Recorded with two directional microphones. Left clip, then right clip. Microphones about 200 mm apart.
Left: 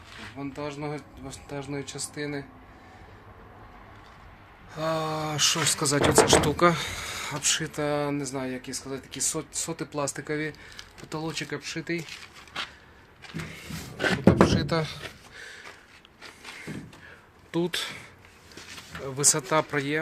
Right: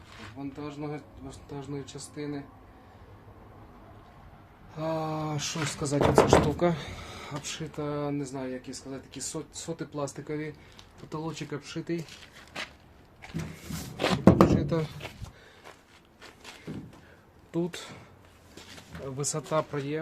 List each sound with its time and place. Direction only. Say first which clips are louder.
0.5 s speech: left 5 dB; 15° left (ahead or behind)
4.7 s speech: left 3 dB; centre (ahead or behind); by 12.0 s 20° right (ahead or behind)
14.0 s a sound: left 1 dB; centre (ahead or behind)
17.5 s speech: left 5 dB; 5° right (ahead or behind)
19.0 s speech: left 8 dB; centre (ahead or behind)